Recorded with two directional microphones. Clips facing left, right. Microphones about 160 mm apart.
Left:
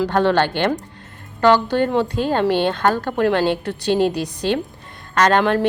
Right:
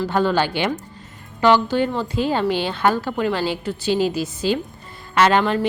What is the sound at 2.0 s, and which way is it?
A woman's voice, 5° right (ahead or behind).